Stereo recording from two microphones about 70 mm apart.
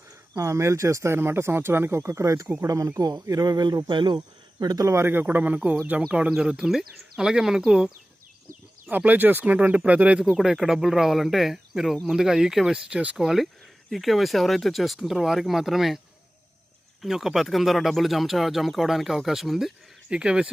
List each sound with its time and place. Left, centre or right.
0.3 s speech: right
1.1 s speech: right
3.0 s speech: right
3.8 s speech: right
4.6 s speech: right
4.9 s speech: right; by 7.9 s centre
8.9 s speech: right
10.3 s speech: centre
13.2 s speech: centre
17.0 s speech: centre